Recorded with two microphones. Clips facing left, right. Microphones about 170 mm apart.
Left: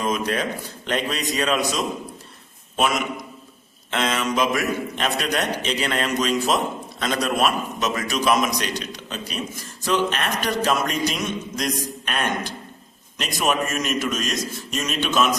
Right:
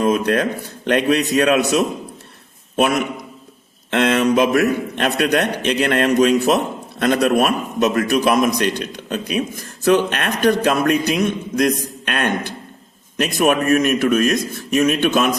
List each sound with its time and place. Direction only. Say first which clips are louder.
0.0 s a man's voice: right 7 dB; 60° right (ahead or behind)
2.7 s a man's voice: right 5 dB; 60° right (ahead or behind)